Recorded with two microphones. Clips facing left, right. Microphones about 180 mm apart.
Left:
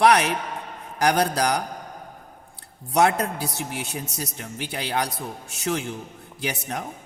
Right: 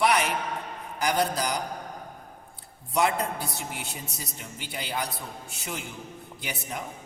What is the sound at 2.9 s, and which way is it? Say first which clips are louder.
A woman's voice: left 5 dB; 75° left (ahead or behind).